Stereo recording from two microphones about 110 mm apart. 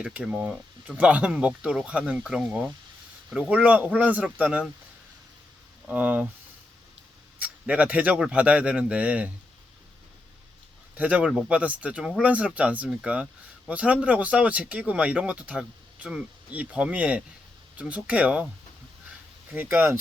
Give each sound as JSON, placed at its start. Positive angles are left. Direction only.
{"t": 0.0, "sound": "speech", "side_deg": -15}
{"t": 5.9, "sound": "speech", "side_deg": -15}
{"t": 7.3, "sound": "speech", "side_deg": -15}
{"t": 10.9, "sound": "speech", "side_deg": -15}
{"t": 19.5, "sound": "speech", "side_deg": -20}